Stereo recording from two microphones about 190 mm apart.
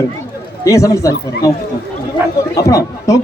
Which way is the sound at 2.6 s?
15° left (ahead or behind).